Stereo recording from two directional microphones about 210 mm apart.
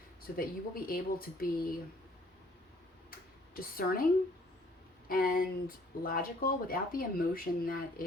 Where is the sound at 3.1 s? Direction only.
45° left (ahead or behind).